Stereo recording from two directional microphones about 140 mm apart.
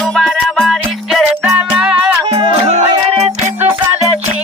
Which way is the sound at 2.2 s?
35° right (ahead or behind).